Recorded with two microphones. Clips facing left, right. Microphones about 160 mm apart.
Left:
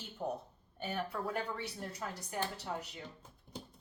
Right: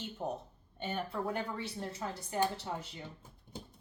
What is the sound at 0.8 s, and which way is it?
Speech, 25° right (ahead or behind).